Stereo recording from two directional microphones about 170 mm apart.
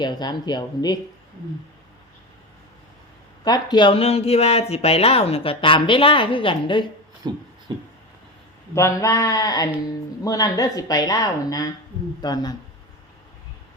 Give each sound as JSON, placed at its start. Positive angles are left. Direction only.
{"t": 0.0, "sound": "a woman's voice", "side_deg": 25}
{"t": 3.4, "sound": "speech", "side_deg": 25}
{"t": 7.2, "sound": "a sound", "side_deg": -25}
{"t": 8.7, "sound": "a woman's voice", "side_deg": 15}